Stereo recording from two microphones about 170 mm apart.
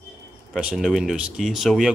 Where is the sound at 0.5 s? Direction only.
Centre (ahead or behind).